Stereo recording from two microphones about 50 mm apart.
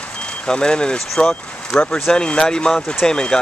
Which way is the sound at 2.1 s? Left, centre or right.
Centre.